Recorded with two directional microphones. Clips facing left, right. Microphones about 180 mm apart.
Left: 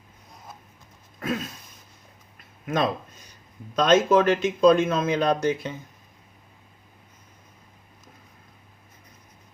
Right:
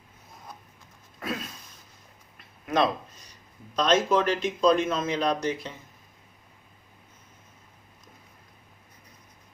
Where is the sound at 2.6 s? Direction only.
45° left (ahead or behind).